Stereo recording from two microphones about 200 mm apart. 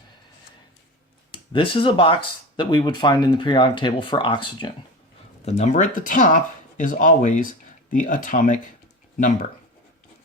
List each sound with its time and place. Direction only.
1.3 s speech: 25° left (ahead or behind)
5.5 s speech: 35° left (ahead or behind)